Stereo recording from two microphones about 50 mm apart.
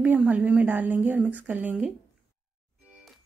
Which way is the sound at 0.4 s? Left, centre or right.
Right.